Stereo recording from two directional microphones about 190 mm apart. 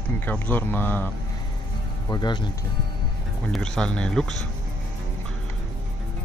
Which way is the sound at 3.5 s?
5° left (ahead or behind).